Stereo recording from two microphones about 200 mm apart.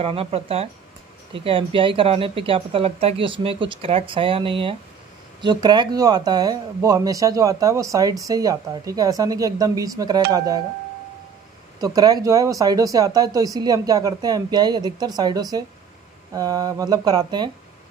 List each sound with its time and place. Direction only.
0.0 s speech: 30° right (ahead or behind)
11.8 s speech: 20° right (ahead or behind)